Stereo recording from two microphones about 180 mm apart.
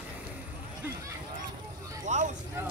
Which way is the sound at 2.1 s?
40° right (ahead or behind).